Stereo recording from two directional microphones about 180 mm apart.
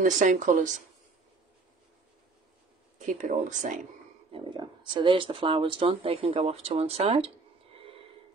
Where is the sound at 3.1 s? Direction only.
45° right (ahead or behind).